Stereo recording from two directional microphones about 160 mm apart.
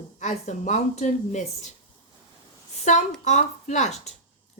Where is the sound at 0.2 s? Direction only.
50° left (ahead or behind).